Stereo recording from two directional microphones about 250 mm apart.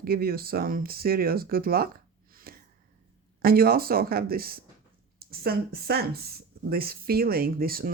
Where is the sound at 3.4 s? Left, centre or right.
Right.